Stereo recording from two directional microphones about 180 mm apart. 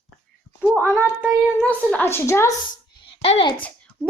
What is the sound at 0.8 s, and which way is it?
Speech, 10° left (ahead or behind).